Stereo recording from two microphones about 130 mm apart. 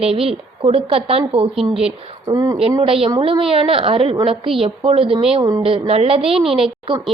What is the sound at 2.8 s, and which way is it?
A woman's voice, 45° right (ahead or behind).